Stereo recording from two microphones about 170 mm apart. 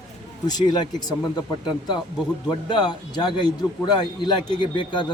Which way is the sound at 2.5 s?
25° left (ahead or behind).